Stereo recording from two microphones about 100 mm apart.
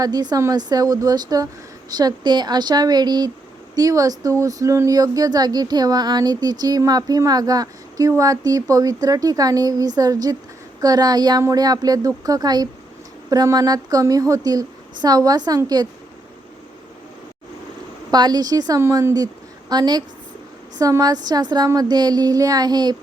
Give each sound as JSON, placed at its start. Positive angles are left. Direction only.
{"t": 0.0, "sound": "speech", "side_deg": -40}
{"t": 18.1, "sound": "speech", "side_deg": -40}
{"t": 18.8, "sound": "a woman's voice", "side_deg": -25}